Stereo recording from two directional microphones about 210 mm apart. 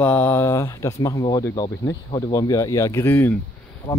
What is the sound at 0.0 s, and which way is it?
Speech, 10° left (ahead or behind).